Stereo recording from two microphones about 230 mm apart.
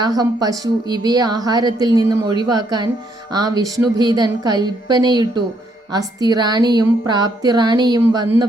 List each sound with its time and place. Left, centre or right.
0.0 s a woman's voice: centre